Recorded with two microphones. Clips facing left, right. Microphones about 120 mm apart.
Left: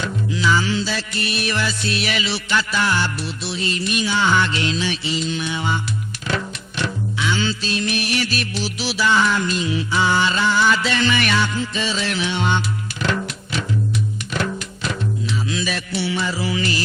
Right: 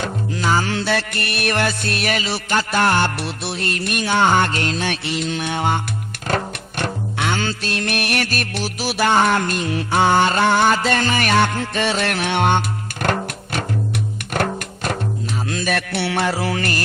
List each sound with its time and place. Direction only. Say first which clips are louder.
0.0 s music: left 1 dB; 50° right (ahead or behind)